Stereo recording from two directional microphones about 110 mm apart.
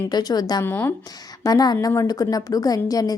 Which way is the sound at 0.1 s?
35° left (ahead or behind).